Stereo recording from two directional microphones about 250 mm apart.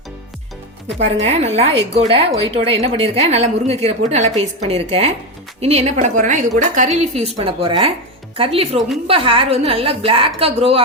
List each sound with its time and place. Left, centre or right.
1.2 s a woman's voice: right